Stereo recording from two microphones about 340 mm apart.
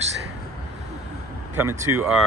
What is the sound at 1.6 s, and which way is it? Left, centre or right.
Speech, centre.